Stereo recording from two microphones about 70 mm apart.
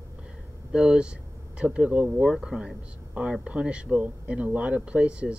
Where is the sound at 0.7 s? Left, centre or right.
Centre.